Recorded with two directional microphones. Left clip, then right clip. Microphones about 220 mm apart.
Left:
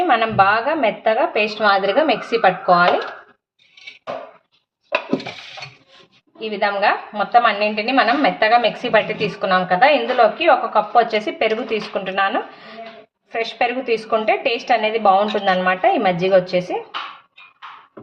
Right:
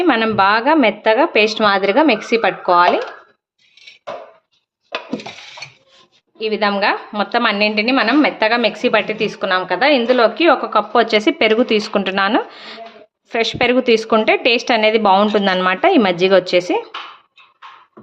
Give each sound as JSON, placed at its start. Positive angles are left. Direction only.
{"t": 0.0, "sound": "a woman's voice", "side_deg": -45}
{"t": 6.4, "sound": "a woman's voice", "side_deg": -45}